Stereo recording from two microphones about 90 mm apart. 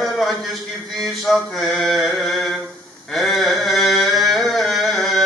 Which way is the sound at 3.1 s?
Centre (ahead or behind).